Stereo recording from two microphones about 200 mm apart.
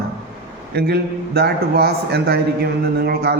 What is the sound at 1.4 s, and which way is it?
A man's voice, 50° right (ahead or behind).